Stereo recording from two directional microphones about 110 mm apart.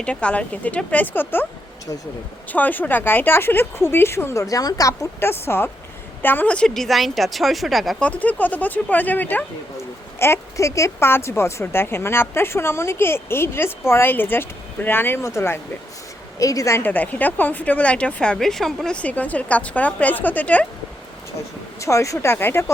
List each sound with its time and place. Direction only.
0.0 s a woman's voice: 10° left (ahead or behind)
2.5 s a woman's voice: 15° left (ahead or behind); by 8.0 s centre (ahead or behind)
8.0 s a woman's voice: 15° left (ahead or behind)
21.8 s speech: 30° left (ahead or behind)